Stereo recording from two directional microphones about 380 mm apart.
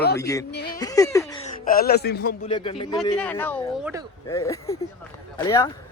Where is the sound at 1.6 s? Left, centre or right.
Left.